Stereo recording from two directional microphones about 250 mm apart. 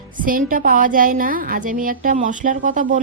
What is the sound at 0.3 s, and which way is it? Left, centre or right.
A woman's voice, right.